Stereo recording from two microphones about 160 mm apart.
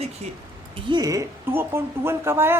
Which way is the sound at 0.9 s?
20° right (ahead or behind).